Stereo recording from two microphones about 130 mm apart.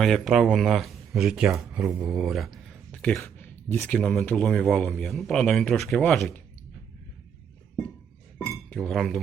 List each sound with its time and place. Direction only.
0.0 s speech: centre (ahead or behind)
2.0 s a sound: centre (ahead or behind)
3.2 s speech: 15° left (ahead or behind)
4.1 s speech: 5° left (ahead or behind)
8.7 s speech: 5° left (ahead or behind)